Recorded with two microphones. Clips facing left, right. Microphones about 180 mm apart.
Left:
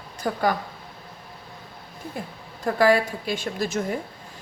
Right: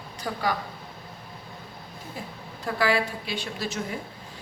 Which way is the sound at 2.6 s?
45° left (ahead or behind).